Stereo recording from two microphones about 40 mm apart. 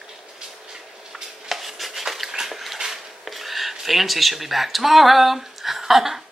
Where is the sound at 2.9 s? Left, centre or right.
Centre.